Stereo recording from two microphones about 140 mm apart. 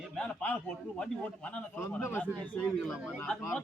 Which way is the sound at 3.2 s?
10° left (ahead or behind).